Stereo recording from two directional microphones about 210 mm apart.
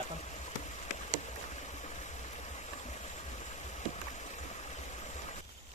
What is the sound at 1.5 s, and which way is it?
Stream, 35° left (ahead or behind).